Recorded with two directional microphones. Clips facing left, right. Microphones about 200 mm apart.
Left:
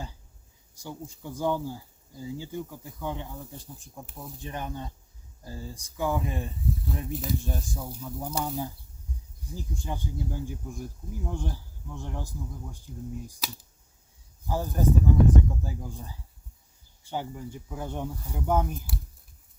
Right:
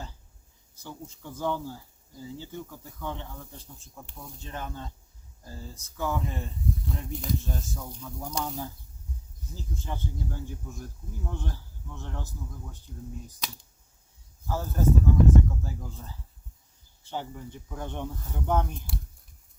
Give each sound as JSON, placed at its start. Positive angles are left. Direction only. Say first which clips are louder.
{"t": 0.8, "sound": "speech", "louder": "left 3 dB", "side_deg": 15}
{"t": 4.4, "sound": "speech", "louder": "left 3 dB", "side_deg": 15}
{"t": 6.8, "sound": "speech", "louder": "left 2 dB", "side_deg": 5}
{"t": 7.4, "sound": "speech", "louder": "left 2 dB", "side_deg": 15}